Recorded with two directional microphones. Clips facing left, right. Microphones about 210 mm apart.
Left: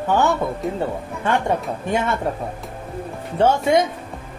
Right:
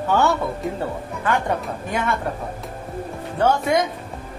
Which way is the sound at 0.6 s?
Centre (ahead or behind).